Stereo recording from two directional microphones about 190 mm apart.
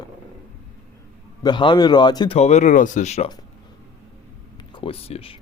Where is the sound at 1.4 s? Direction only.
25° left (ahead or behind).